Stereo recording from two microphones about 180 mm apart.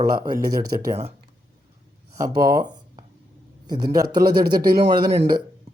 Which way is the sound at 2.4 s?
20° right (ahead or behind).